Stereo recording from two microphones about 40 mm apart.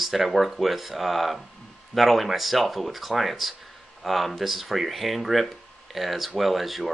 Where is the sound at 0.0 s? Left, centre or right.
Centre.